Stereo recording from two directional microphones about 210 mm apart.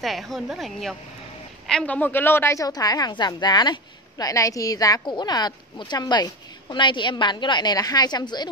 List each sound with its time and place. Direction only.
0.0 s a woman's voice: centre (ahead or behind); by 8.5 s 20° left (ahead or behind)